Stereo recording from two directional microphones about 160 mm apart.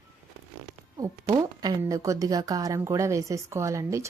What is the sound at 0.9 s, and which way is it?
Speech, 20° right (ahead or behind).